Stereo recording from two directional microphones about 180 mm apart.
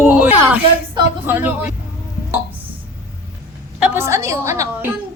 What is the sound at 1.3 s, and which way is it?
Speech, 10° right (ahead or behind).